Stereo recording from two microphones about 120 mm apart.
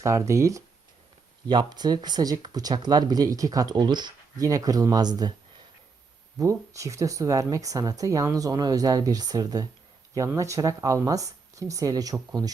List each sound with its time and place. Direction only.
0.0 s speech: 25° right (ahead or behind)
1.5 s speech: 35° right (ahead or behind)
6.4 s speech: 25° right (ahead or behind)